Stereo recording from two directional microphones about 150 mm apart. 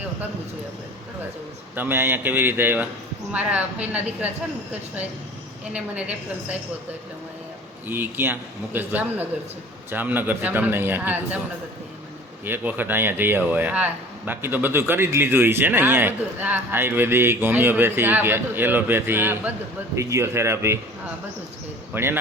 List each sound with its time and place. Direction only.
1.7 s speech: 15° right (ahead or behind)
5.7 s speech: 10° right (ahead or behind)
7.9 s speech: 15° right (ahead or behind)
12.5 s speech: 10° right (ahead or behind)
21.9 s speech: 15° right (ahead or behind)